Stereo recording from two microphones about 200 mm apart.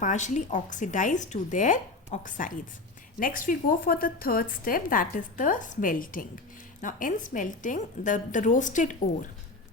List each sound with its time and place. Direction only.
0.0 s speech: 35° left (ahead or behind)